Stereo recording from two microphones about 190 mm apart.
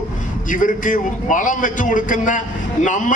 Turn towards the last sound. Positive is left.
turn(degrees=40)  # may be behind; listen again after turning